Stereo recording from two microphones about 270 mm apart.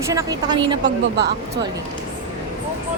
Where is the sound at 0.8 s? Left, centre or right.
Right.